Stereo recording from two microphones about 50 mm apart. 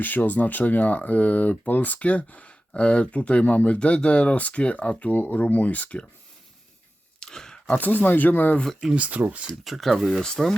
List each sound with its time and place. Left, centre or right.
0.0 s speech: left
7.2 s a sound: centre
7.7 s speech: left
8.9 s speech: right
9.6 s speech: centre